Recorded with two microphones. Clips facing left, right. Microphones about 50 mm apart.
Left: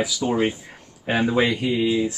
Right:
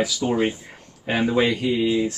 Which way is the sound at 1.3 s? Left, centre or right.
Centre.